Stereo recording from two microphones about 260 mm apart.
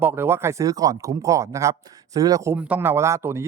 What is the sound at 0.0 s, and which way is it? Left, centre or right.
Speech, centre.